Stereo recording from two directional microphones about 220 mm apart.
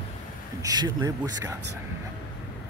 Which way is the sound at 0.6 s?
15° right (ahead or behind).